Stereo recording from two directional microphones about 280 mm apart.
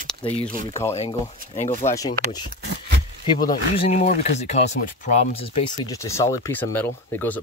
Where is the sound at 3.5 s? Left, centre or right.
Left.